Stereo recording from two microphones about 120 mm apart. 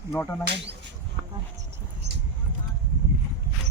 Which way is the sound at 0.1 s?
20° left (ahead or behind).